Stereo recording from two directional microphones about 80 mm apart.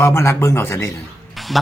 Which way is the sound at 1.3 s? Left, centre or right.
Centre.